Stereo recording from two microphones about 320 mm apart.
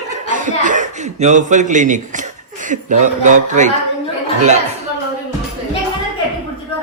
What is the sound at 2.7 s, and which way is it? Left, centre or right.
A man's voice, right.